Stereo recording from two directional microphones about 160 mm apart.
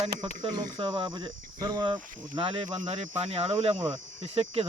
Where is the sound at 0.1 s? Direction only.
80° right.